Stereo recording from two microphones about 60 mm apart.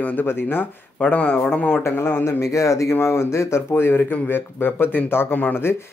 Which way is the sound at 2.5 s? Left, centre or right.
Left.